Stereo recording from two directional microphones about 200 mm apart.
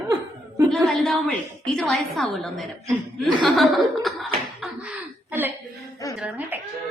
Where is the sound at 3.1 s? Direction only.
Centre (ahead or behind).